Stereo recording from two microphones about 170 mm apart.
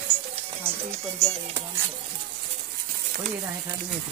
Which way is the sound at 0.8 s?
40° right (ahead or behind).